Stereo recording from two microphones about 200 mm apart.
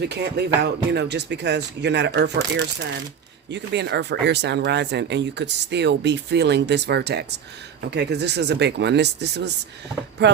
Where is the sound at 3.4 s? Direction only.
60° right (ahead or behind).